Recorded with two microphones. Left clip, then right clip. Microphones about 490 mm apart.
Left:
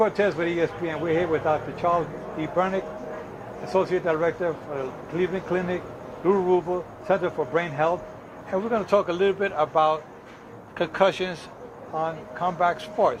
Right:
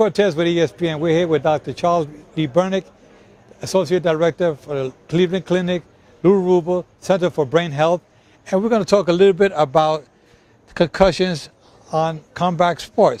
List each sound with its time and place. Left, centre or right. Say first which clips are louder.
0.0 s speech: right 6 dB; right
11.9 s speech: right 8 dB; right